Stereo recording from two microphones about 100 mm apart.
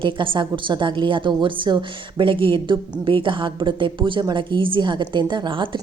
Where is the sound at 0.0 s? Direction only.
55° right (ahead or behind).